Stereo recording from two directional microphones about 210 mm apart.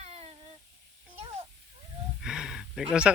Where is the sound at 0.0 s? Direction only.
30° right (ahead or behind).